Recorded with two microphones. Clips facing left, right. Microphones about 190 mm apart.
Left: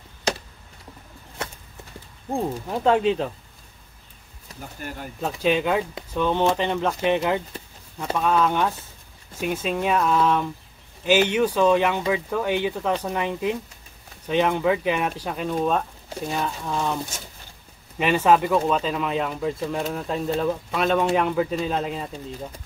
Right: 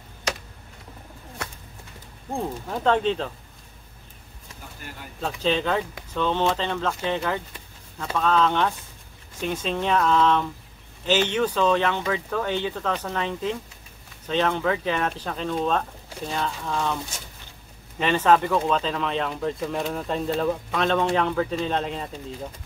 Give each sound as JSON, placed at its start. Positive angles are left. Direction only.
{"t": 2.3, "sound": "speech", "side_deg": 15}
{"t": 4.6, "sound": "speech", "side_deg": 45}
{"t": 5.2, "sound": "speech", "side_deg": 10}